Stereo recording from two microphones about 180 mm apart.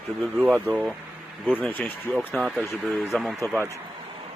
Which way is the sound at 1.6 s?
10° left (ahead or behind).